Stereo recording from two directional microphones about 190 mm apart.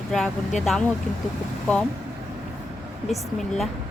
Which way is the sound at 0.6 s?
Centre (ahead or behind).